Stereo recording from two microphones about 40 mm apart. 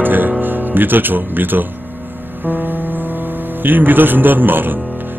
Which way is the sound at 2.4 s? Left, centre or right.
Right.